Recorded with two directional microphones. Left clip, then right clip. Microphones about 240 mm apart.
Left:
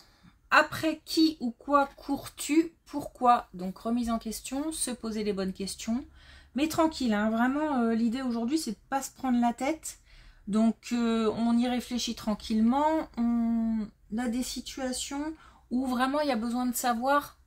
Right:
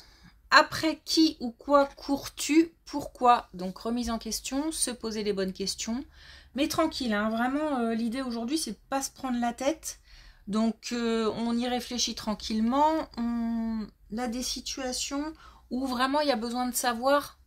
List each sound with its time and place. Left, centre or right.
0.5 s speech: right